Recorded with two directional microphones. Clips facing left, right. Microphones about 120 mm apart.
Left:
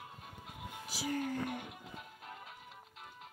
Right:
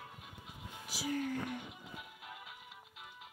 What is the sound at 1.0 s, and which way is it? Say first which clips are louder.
Speech: left 1 dB; 45° left (ahead or behind).